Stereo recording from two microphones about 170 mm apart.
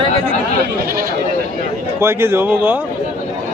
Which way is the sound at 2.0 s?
15° right (ahead or behind).